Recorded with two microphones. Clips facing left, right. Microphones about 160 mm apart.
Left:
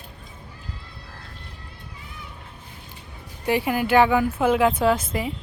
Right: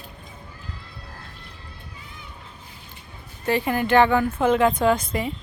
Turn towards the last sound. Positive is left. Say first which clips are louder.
# even
turn(degrees=5)  # may be behind; listen again after turning